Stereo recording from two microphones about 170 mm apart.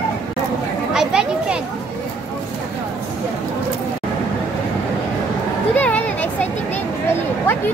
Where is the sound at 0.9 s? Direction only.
5° right (ahead or behind).